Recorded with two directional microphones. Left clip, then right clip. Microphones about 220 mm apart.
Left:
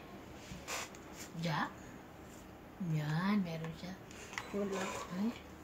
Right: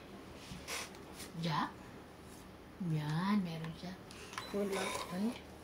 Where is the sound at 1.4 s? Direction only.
35° left (ahead or behind).